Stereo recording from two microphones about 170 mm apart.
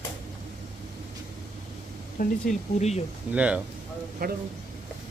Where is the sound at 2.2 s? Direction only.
50° left (ahead or behind).